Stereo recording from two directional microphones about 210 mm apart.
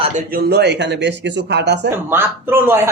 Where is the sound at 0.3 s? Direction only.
45° right (ahead or behind).